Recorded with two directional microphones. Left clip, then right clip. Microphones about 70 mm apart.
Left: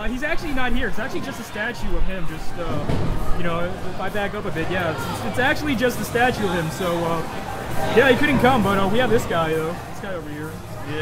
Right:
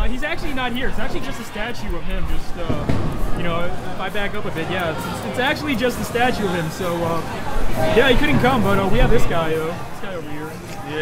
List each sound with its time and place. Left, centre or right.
0.2 s speech: centre
3.4 s speech: centre
7.9 s speech: centre